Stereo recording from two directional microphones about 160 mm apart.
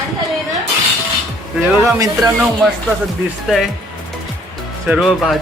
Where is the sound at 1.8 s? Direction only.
20° right (ahead or behind).